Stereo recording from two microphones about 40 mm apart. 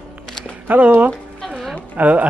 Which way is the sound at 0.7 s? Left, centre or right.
Right.